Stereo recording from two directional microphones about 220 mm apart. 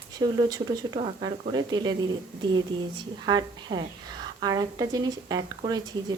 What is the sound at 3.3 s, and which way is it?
Speech, 20° right (ahead or behind).